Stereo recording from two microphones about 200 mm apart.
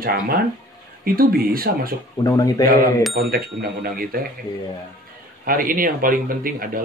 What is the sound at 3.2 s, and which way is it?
Speech, 50° right (ahead or behind).